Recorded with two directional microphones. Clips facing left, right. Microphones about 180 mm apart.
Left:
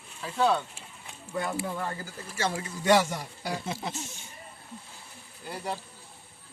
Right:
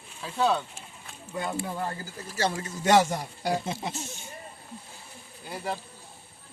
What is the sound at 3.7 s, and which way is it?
Speech, 15° right (ahead or behind).